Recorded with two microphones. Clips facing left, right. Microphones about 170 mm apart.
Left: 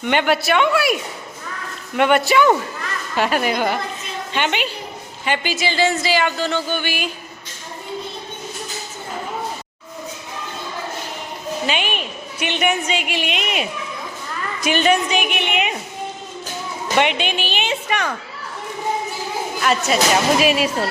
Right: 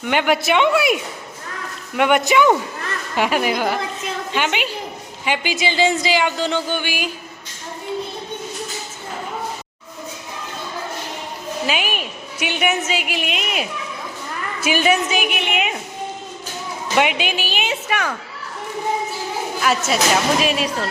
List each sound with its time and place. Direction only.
0.0 s a woman's voice: 5° right (ahead or behind)
0.4 s speech: 20° right (ahead or behind)
2.0 s a woman's voice: 15° right (ahead or behind)
11.6 s a woman's voice: 5° right (ahead or behind)
17.0 s a woman's voice: 5° right (ahead or behind)
19.6 s a woman's voice: centre (ahead or behind)